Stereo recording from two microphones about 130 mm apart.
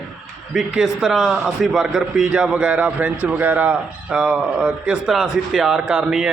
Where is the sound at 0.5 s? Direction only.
5° right (ahead or behind).